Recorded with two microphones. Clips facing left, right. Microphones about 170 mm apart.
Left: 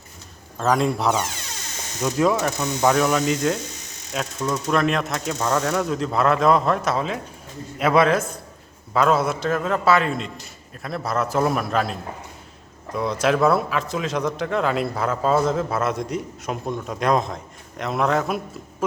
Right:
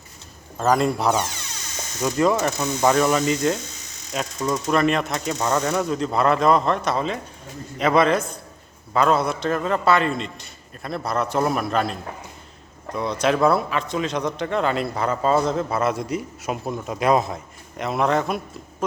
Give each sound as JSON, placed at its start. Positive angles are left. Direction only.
{"t": 0.5, "sound": "speech", "side_deg": 0}